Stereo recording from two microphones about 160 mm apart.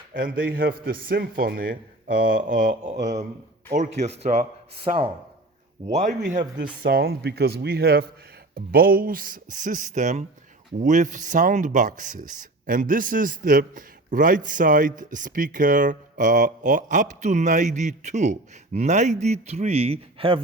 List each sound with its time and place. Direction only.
0.3 s a man's voice: 65° right (ahead or behind); by 4.1 s 45° right (ahead or behind)
4.9 s speech: 35° right (ahead or behind)
5.9 s speech: 50° right (ahead or behind)
6.8 s speech: 75° right (ahead or behind)
8.5 s a man's voice: 70° right (ahead or behind); by 20.4 s 35° right (ahead or behind)